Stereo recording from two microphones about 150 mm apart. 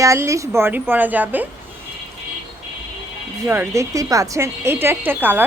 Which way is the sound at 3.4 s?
15° right (ahead or behind).